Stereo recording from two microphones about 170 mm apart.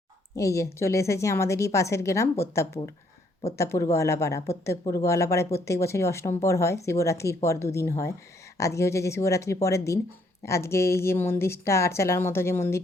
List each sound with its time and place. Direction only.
0.3 s speech: 15° left (ahead or behind)